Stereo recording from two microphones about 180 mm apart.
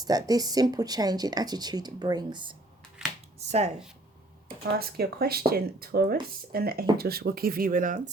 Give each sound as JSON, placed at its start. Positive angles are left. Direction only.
{"t": 0.0, "sound": "speech", "side_deg": -20}
{"t": 3.0, "sound": "a sound", "side_deg": -5}
{"t": 4.8, "sound": "speech", "side_deg": -60}